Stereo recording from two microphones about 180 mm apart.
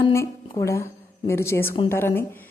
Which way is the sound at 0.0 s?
15° left (ahead or behind).